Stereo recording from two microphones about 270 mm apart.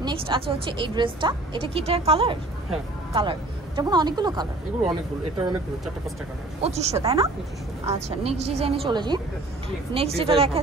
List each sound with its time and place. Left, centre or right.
0.0 s speech: centre
6.6 s speech: right